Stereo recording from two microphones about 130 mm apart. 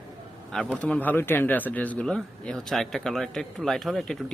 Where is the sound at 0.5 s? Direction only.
10° left (ahead or behind).